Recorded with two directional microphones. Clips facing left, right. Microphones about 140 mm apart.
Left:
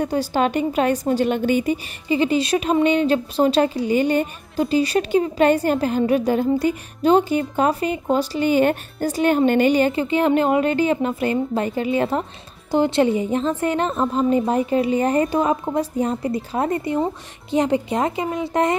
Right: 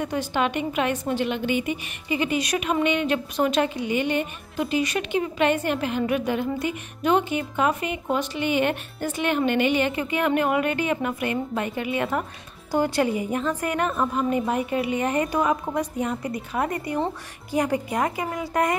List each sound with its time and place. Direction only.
0.0 s a woman's voice: 35° left (ahead or behind)